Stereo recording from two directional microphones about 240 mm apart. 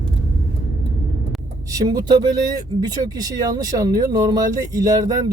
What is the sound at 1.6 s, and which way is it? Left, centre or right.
Speech, centre.